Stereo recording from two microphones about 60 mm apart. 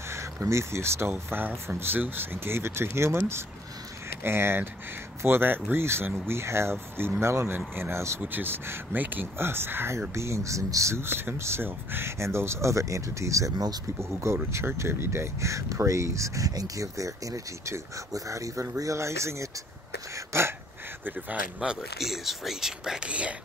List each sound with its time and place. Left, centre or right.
0.1 s speech: right
1.1 s speech: right
4.2 s speech: right
8.2 s speech: right
10.1 s speech: right
11.0 s speech: right
13.9 s speech: right
21.0 s speech: right
21.5 s speech: centre